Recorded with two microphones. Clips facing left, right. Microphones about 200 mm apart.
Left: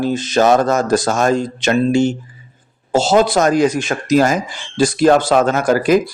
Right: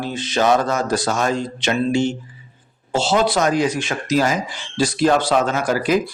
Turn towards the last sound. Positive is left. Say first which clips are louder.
# left 5 dB
turn(degrees=45)  # may be behind; listen again after turning